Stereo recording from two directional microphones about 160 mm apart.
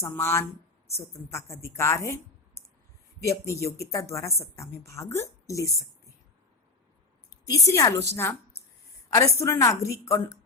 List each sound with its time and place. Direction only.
0.0 s a woman's voice: 15° left (ahead or behind)
3.2 s a woman's voice: 20° left (ahead or behind)
7.4 s a woman's voice: 20° left (ahead or behind)